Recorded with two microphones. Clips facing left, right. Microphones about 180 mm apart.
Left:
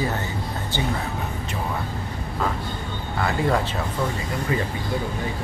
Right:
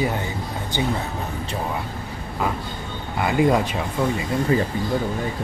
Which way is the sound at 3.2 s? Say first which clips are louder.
Right 4 dB; 15° right (ahead or behind).